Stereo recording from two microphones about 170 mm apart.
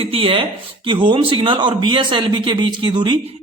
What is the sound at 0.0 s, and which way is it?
A woman's voice, 35° right (ahead or behind).